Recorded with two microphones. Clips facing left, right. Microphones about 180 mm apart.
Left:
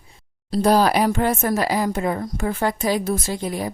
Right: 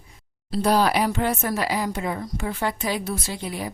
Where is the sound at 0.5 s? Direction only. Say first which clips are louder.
Left 3 dB; 40° left (ahead or behind).